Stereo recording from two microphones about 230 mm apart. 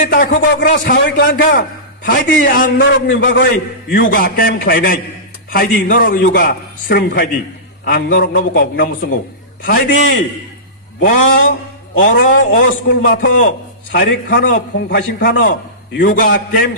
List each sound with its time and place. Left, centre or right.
0.0 s a man's voice: left
4.2 s a man's voice: left
11.0 s a man's voice: left